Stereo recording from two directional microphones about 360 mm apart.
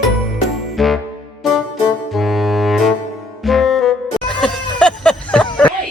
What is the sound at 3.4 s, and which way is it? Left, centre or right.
Music, centre.